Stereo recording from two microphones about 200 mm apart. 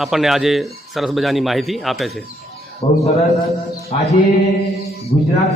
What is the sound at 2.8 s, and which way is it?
Speech, 30° left (ahead or behind).